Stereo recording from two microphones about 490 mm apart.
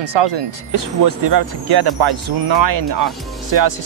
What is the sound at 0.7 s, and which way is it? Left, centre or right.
Speech, right.